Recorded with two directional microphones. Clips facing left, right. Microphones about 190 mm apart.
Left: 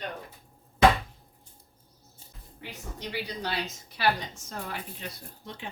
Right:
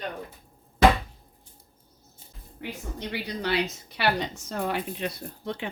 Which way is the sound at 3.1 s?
70° right (ahead or behind).